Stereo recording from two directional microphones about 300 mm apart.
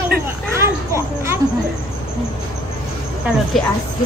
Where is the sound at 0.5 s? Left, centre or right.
Centre.